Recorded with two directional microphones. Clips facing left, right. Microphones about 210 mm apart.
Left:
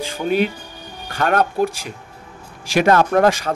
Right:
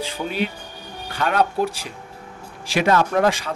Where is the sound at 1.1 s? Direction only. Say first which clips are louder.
Left 2 dB; 50° left (ahead or behind).